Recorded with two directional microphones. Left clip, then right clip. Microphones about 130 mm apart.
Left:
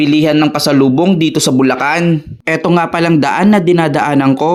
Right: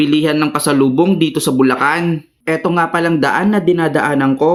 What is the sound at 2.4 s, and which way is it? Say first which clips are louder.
Speech: left 2 dB; 90° left.